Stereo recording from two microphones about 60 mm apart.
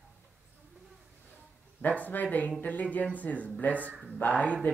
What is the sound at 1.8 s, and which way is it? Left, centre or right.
Speech, left.